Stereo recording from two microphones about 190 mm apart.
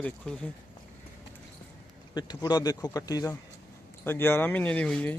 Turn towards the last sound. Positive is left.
turn(degrees=5)  # may be behind; listen again after turning